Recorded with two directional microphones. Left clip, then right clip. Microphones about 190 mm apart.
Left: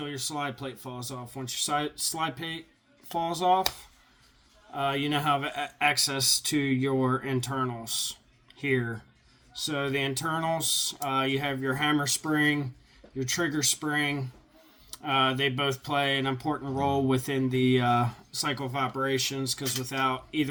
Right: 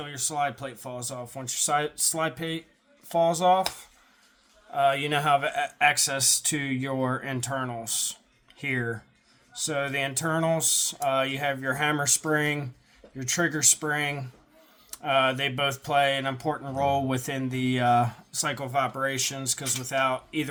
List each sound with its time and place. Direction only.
0.0 s speech: 50° right (ahead or behind)
4.7 s speech: 50° right (ahead or behind)